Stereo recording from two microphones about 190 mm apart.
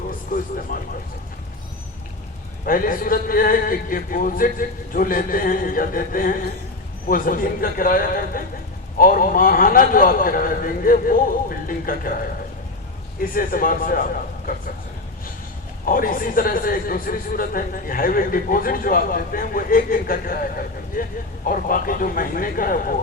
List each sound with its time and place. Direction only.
0.3 s speech: 45° left (ahead or behind)
2.6 s a man's voice: 45° left (ahead or behind)
13.1 s a man's voice: 50° left (ahead or behind)
15.9 s a man's voice: 45° left (ahead or behind)